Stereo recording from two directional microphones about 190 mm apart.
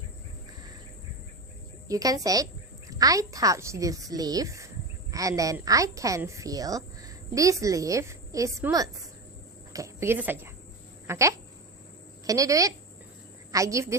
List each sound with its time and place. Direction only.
1.9 s a woman's voice: 20° right (ahead or behind)